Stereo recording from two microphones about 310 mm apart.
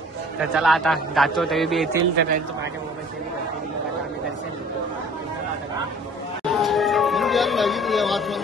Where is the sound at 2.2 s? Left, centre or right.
Right.